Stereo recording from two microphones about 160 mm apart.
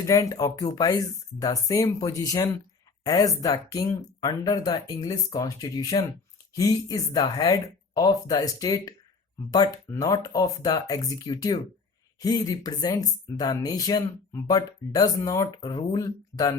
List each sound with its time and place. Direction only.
0.0 s speech: 20° left (ahead or behind)